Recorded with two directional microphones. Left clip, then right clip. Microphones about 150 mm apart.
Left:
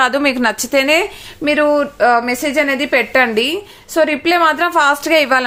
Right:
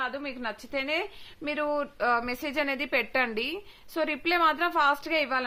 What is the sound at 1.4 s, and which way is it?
A woman's voice, 15° right (ahead or behind).